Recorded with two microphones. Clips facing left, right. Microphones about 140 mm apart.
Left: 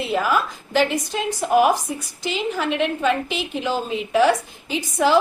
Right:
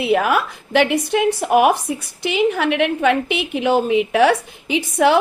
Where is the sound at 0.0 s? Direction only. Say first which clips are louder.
Right 4 dB; 65° right (ahead or behind).